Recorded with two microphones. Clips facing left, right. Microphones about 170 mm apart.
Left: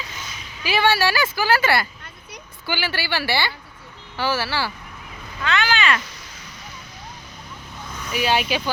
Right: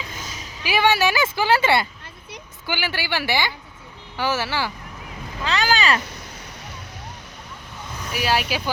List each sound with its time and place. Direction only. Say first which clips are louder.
0.1 s a sound: right 2 dB; 40° right (ahead or behind)
0.6 s speech: even; 15° right (ahead or behind)
5.4 s speech: even; 35° right (ahead or behind)
8.1 s speech: left 2 dB; 5° right (ahead or behind)